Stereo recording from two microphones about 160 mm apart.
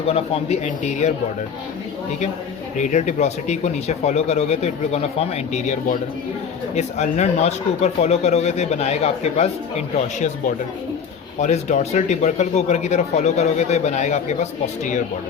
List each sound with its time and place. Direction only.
0.1 s speech: 45° left (ahead or behind)
2.7 s speech: 50° left (ahead or behind)
11.3 s speech: 45° left (ahead or behind)